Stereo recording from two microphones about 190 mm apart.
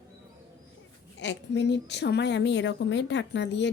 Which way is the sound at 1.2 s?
65° left (ahead or behind).